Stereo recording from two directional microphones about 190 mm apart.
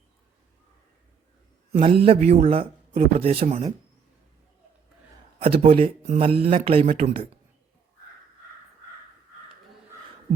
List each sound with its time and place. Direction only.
1.7 s a man's voice: 30° right (ahead or behind)
5.4 s speech: 30° right (ahead or behind)